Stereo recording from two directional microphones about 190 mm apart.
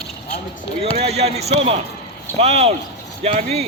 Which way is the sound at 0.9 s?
35° right (ahead or behind).